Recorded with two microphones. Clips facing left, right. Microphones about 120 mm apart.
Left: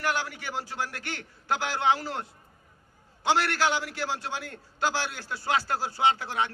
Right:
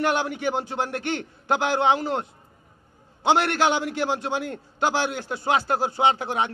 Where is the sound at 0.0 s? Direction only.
20° right (ahead or behind).